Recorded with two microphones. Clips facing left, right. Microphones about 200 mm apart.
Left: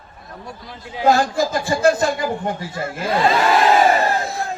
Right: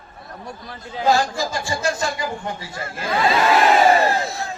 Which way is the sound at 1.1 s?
55° left (ahead or behind).